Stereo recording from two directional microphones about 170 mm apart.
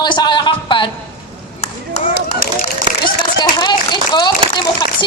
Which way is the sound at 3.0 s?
25° left (ahead or behind).